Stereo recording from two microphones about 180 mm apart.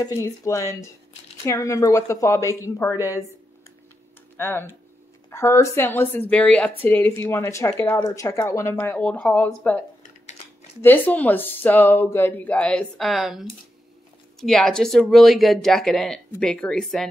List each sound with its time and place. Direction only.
0.0 s speech: 20° left (ahead or behind)
4.4 s speech: 15° left (ahead or behind)